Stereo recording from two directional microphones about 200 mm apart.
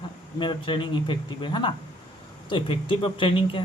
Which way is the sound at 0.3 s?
25° left (ahead or behind).